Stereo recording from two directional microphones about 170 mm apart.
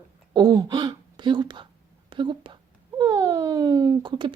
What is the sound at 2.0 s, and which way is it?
Whispering, 25° right (ahead or behind).